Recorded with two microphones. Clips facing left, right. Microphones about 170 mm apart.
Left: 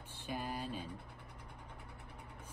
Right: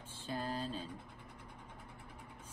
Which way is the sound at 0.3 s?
15° left (ahead or behind).